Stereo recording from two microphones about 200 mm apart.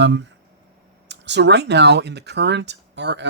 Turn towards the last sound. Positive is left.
turn(degrees=-60)  # may be behind; listen again after turning